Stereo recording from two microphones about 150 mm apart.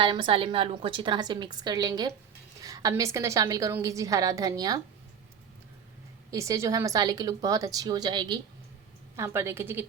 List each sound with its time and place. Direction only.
0.0 s a woman's voice: 35° right (ahead or behind)
2.6 s a sound: 25° right (ahead or behind)
2.9 s a woman's voice: 20° right (ahead or behind)
6.3 s a woman's voice: 20° right (ahead or behind)
9.1 s a woman's voice: 15° right (ahead or behind)